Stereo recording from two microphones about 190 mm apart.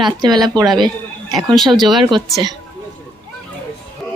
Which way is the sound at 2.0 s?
25° right (ahead or behind).